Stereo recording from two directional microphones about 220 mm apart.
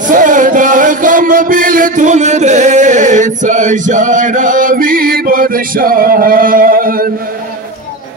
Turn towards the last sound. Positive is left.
turn(degrees=-40)  # may be behind; listen again after turning